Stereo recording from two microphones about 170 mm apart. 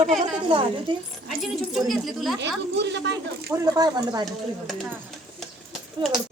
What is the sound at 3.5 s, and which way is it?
Speech, 25° right (ahead or behind).